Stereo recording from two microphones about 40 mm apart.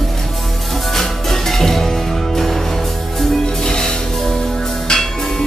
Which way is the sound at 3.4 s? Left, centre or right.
Centre.